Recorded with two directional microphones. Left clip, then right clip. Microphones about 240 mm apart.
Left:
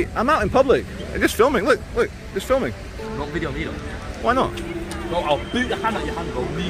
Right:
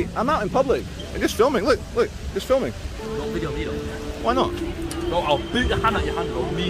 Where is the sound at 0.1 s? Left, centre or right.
Centre.